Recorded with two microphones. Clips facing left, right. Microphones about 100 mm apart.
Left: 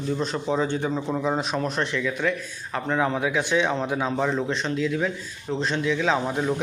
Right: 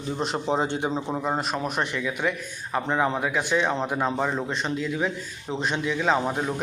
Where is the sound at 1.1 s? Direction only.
5° right (ahead or behind).